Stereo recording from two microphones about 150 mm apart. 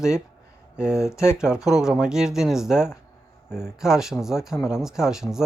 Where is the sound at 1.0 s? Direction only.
20° left (ahead or behind).